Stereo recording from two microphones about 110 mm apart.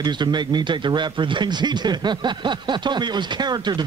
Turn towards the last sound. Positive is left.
turn(degrees=-40)  # may be behind; listen again after turning